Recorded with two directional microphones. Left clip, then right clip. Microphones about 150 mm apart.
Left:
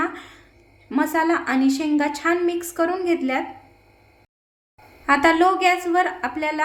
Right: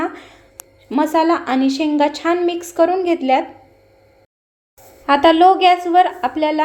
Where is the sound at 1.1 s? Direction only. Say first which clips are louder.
Right 5 dB; centre (ahead or behind).